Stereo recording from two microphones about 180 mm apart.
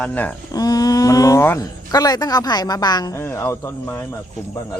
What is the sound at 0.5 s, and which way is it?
Speech, 20° left (ahead or behind).